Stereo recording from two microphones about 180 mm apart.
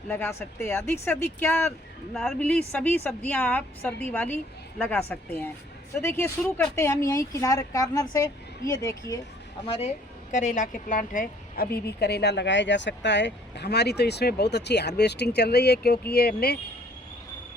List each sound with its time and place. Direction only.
0.1 s a woman's voice: 10° left (ahead or behind)
9.6 s a woman's voice: 35° left (ahead or behind); by 16.6 s 60° left (ahead or behind)